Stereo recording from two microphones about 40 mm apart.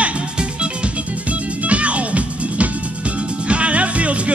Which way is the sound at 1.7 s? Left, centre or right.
Right.